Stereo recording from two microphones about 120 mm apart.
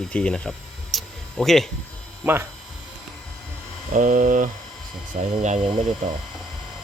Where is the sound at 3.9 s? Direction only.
90° right.